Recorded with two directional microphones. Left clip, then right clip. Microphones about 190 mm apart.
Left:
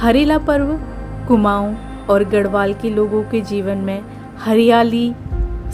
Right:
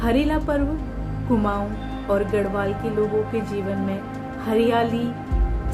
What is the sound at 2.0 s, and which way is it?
A woman's voice, 55° left (ahead or behind).